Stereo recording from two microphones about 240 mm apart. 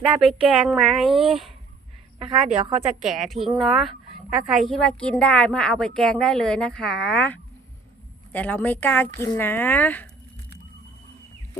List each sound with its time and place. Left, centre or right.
0.2 s a woman's voice: centre
2.1 s a woman's voice: right
3.0 s a woman's voice: centre